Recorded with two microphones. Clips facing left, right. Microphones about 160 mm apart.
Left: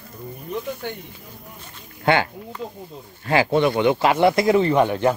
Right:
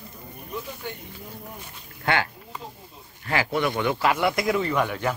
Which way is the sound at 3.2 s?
25° left (ahead or behind).